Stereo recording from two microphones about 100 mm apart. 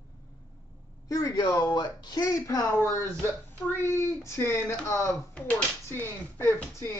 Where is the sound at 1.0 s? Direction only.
35° left (ahead or behind).